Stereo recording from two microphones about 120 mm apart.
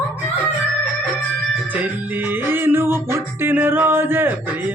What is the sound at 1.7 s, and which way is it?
Speech, 15° right (ahead or behind).